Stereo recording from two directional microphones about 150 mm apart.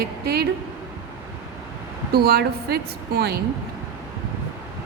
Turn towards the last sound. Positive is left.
turn(degrees=-90)